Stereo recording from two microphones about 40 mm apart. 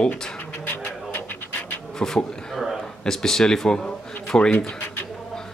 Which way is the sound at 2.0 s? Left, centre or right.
Centre.